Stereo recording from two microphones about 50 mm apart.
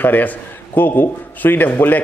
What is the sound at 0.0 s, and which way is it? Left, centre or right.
A man's voice, left.